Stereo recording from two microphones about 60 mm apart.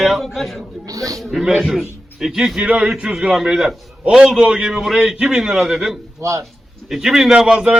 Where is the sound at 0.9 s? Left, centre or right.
Right.